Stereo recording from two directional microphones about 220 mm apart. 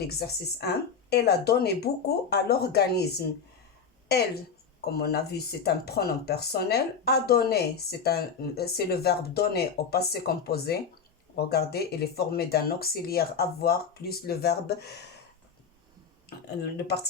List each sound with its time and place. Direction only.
0.0 s speech: 45° left (ahead or behind)
4.9 s speech: 45° left (ahead or behind)
16.7 s speech: 50° left (ahead or behind)